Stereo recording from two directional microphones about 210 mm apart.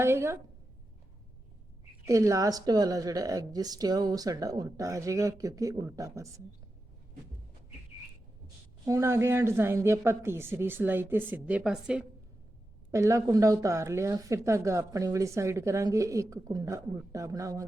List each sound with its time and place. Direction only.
0.0 s speech: 10° right (ahead or behind)
2.0 s speech: 15° right (ahead or behind)
8.8 s speech: 15° right (ahead or behind)
12.9 s speech: 15° right (ahead or behind)